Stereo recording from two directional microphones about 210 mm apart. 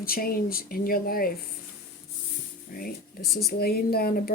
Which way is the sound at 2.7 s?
45° left (ahead or behind).